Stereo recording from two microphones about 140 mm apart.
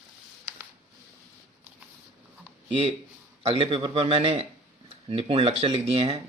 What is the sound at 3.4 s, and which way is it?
Speech, 40° right (ahead or behind).